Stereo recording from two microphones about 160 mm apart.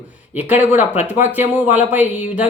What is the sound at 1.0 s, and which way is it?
Speech, 10° right (ahead or behind).